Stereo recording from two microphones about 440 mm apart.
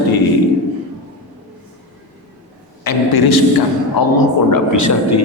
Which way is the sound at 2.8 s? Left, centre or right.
Left.